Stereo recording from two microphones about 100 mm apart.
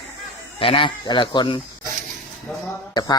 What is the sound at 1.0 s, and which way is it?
Speech, 50° left (ahead or behind).